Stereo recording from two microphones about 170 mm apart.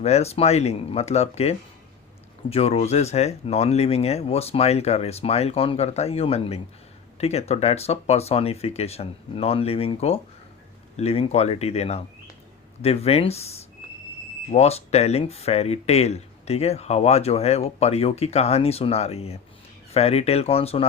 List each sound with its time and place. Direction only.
0.0 s speech: 40° left (ahead or behind)